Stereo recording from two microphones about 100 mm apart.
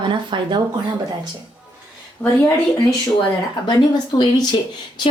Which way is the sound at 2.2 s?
20° left (ahead or behind).